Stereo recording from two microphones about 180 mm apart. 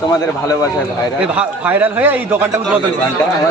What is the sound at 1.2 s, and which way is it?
A man's voice, 10° right (ahead or behind).